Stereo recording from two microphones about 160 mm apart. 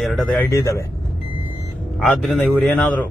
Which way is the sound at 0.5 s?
20° left (ahead or behind).